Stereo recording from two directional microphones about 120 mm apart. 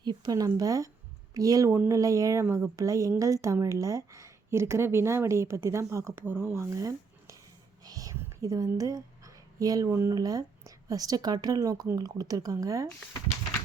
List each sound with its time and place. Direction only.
0.0 s a woman's voice: 35° right (ahead or behind)
7.9 s a sound: 30° right (ahead or behind)
10.8 s a woman's voice: 30° right (ahead or behind)